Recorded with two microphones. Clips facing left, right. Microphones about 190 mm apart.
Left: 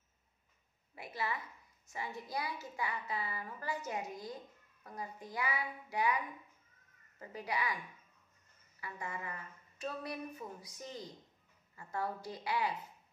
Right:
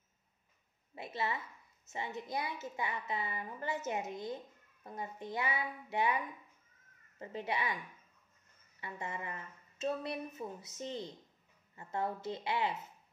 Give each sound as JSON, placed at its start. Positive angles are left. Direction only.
{"t": 0.9, "sound": "a woman's voice", "side_deg": -25}
{"t": 7.2, "sound": "a woman's voice", "side_deg": -25}
{"t": 8.8, "sound": "a woman's voice", "side_deg": -25}